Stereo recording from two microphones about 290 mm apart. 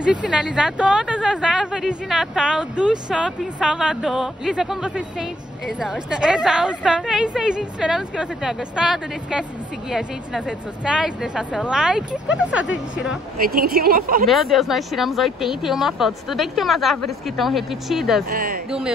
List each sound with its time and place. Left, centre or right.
0.0 s speech: centre
10.9 s speech: centre
13.4 s speech: right
14.2 s speech: centre
18.3 s speech: right
18.7 s speech: centre